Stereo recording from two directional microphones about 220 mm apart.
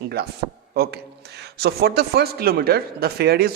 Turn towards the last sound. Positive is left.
turn(degrees=-45)  # may be behind; listen again after turning